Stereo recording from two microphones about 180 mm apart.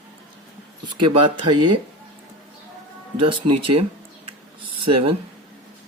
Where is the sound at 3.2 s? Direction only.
30° right (ahead or behind).